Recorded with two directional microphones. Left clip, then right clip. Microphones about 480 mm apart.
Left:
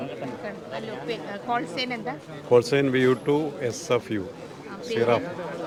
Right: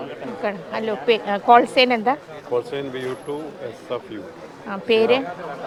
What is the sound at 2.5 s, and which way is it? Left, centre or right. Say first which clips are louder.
Speech: left 5 dB; left.